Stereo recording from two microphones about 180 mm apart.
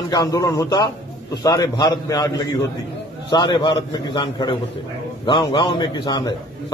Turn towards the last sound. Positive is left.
turn(degrees=25)  # may be behind; listen again after turning